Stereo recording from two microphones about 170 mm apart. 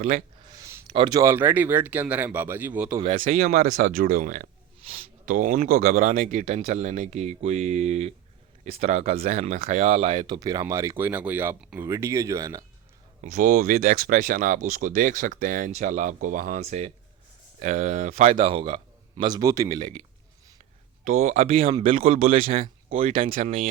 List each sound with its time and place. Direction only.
0.5 s a sound: 15° right (ahead or behind)
0.9 s speech: 30° right (ahead or behind)
1.2 s speech: 10° right (ahead or behind)
3.2 s speech: 50° right (ahead or behind); by 12.6 s 20° right (ahead or behind)
13.2 s speech: 50° right (ahead or behind); by 20.0 s 25° right (ahead or behind)
21.0 s speech: 45° right (ahead or behind)
23.4 s speech: 45° right (ahead or behind)